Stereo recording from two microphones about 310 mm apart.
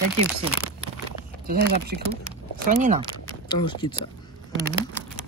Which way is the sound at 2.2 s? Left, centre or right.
Right.